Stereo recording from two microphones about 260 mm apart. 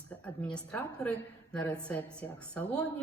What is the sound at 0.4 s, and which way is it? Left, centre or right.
A woman's voice, centre.